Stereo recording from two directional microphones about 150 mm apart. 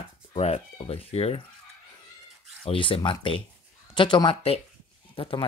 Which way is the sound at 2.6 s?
35° left (ahead or behind).